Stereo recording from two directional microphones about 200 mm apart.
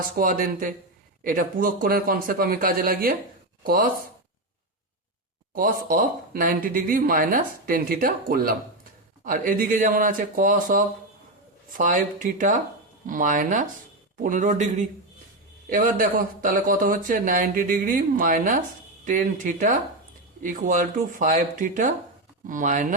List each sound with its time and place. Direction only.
0.0 s speech: 45° right (ahead or behind)
5.5 s speech: 45° right (ahead or behind)